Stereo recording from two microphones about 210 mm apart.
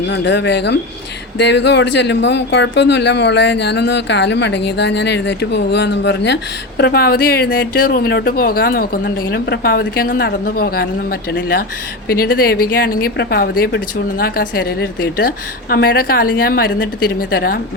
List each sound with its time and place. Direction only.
0.1 s speech: 55° left (ahead or behind)